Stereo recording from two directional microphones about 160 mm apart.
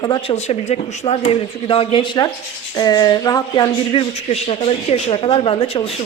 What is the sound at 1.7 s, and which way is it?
Speech, 35° left (ahead or behind).